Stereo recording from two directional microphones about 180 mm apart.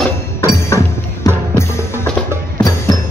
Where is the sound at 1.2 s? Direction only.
15° left (ahead or behind).